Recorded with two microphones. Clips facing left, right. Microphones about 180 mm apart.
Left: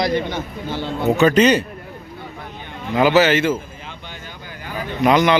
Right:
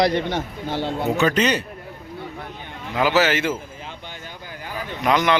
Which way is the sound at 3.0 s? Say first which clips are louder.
Left 5 dB; centre (ahead or behind).